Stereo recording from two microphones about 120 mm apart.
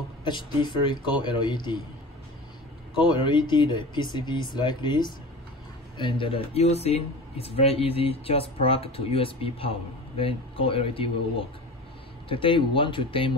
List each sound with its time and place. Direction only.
0.2 s speech: 40° left (ahead or behind)
3.1 s speech: 40° left (ahead or behind)